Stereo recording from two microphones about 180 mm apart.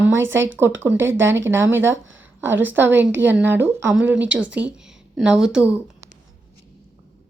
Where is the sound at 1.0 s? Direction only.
90° right.